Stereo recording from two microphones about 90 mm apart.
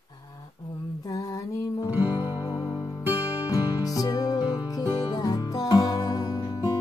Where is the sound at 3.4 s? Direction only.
40° left (ahead or behind).